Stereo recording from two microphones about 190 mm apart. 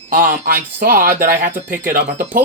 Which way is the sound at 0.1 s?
45° right (ahead or behind).